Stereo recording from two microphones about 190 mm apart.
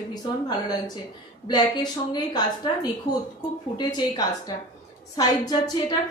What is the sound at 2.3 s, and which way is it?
A woman's voice, 20° left (ahead or behind).